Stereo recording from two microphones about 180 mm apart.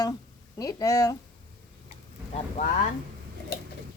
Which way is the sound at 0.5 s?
20° left (ahead or behind).